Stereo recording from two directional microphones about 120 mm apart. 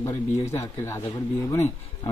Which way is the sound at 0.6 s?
20° left (ahead or behind).